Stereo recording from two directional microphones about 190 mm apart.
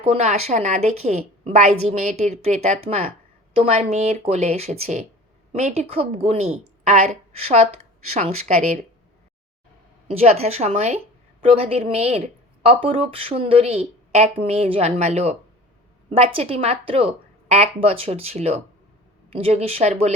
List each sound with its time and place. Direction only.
0.0 s a woman's voice: 35° right (ahead or behind)
10.1 s a woman's voice: 35° right (ahead or behind)